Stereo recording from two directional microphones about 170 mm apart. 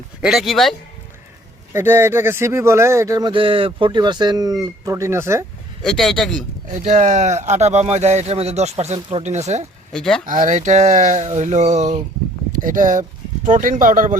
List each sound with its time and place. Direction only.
0.2 s speech: centre (ahead or behind)
1.7 s speech: 15° right (ahead or behind)
5.8 s speech: centre (ahead or behind)
6.7 s speech: 45° right (ahead or behind)
9.9 s speech: 5° left (ahead or behind)
10.2 s speech: 50° right (ahead or behind)